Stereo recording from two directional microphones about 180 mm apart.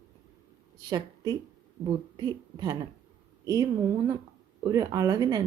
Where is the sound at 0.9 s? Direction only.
25° right (ahead or behind).